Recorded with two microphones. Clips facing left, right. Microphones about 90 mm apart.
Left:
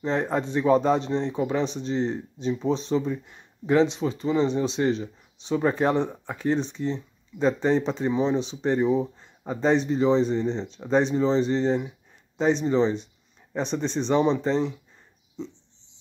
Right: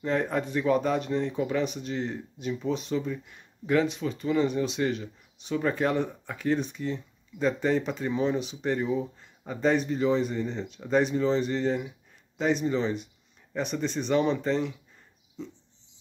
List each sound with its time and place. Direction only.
0.0 s speech: 30° left (ahead or behind)